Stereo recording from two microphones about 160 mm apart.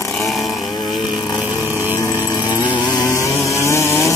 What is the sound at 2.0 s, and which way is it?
Chainsaw, 20° left (ahead or behind).